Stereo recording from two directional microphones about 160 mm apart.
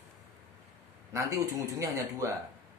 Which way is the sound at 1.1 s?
20° right (ahead or behind).